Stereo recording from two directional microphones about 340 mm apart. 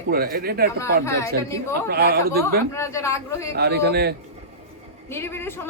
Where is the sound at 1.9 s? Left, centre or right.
Right.